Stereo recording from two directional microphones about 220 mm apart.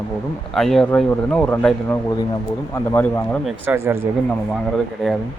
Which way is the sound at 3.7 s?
10° right (ahead or behind).